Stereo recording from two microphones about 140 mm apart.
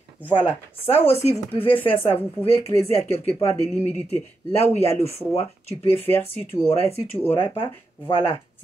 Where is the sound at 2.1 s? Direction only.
15° left (ahead or behind).